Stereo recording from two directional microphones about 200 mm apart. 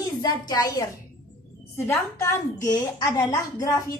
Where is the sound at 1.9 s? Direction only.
15° left (ahead or behind).